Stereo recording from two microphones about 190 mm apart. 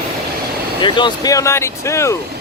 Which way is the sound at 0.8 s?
25° left (ahead or behind).